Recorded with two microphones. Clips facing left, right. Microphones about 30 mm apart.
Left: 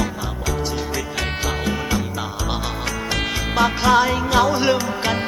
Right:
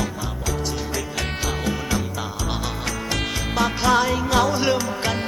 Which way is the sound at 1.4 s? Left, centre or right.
Centre.